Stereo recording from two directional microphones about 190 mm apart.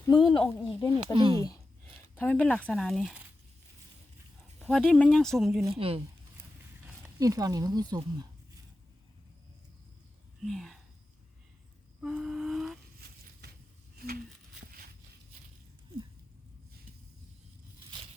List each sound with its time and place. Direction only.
0.2 s speech: 25° left (ahead or behind)
0.4 s speech: 5° left (ahead or behind)
0.9 s speech: 25° right (ahead or behind)
1.4 s speech: 20° left (ahead or behind); by 3.2 s centre (ahead or behind)
4.7 s speech: 5° left (ahead or behind)
5.7 s speech: 30° right (ahead or behind)
7.2 s speech: 20° right (ahead or behind)
10.4 s speech: centre (ahead or behind)
11.9 s a sound: 5° right (ahead or behind)
13.0 s a sound: 55° right (ahead or behind)